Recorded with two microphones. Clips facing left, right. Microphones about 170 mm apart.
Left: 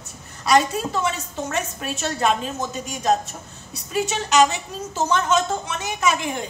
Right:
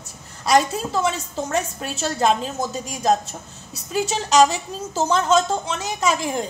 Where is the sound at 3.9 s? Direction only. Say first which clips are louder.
Right 2 dB; 35° right (ahead or behind).